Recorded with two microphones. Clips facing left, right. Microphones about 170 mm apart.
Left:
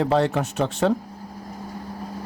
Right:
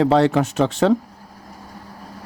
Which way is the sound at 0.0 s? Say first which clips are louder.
Right 5 dB; 85° right.